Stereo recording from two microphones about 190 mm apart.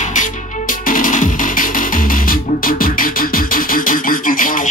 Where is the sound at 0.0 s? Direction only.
40° left (ahead or behind).